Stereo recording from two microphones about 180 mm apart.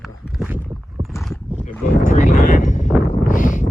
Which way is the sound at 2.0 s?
45° left (ahead or behind).